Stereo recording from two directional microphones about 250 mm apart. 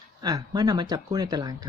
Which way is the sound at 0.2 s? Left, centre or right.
Centre.